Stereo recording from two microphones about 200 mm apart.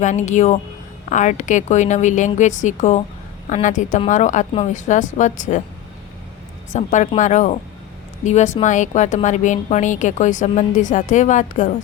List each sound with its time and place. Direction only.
0.0 s a woman's voice: 35° left (ahead or behind)
6.7 s a woman's voice: 40° left (ahead or behind)